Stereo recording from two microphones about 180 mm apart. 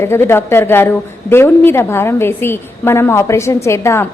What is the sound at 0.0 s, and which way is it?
A woman's voice, 15° left (ahead or behind).